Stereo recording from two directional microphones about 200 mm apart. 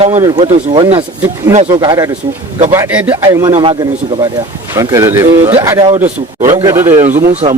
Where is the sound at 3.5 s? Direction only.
25° right (ahead or behind).